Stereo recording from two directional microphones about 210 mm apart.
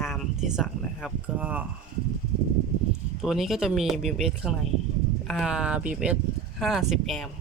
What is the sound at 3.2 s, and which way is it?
Speech, centre (ahead or behind).